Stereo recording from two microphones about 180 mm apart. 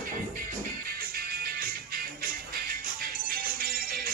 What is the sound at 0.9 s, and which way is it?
Music, 55° right (ahead or behind).